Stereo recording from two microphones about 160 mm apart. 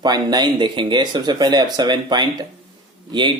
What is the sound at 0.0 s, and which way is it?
Speech, 25° right (ahead or behind).